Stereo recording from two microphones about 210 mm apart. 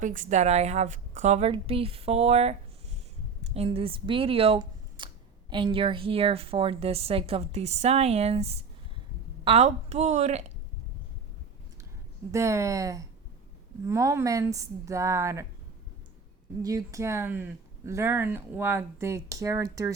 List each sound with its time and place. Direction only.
0.0 s a woman's voice: 40° right (ahead or behind)
12.3 s speech: 15° right (ahead or behind)
16.6 s speech: 15° right (ahead or behind)